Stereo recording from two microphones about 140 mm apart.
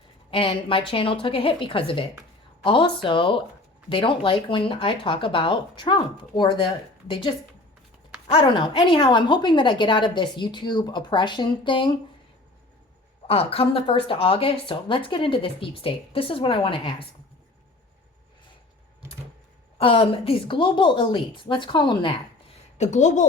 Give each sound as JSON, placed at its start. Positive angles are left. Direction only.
{"t": 0.3, "sound": "speech", "side_deg": 40}
{"t": 8.4, "sound": "speech", "side_deg": 35}
{"t": 13.2, "sound": "speech", "side_deg": 45}
{"t": 19.8, "sound": "speech", "side_deg": 40}
{"t": 22.8, "sound": "speech", "side_deg": 55}